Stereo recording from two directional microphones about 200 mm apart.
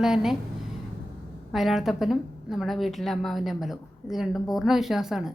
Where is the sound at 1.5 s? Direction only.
Centre (ahead or behind).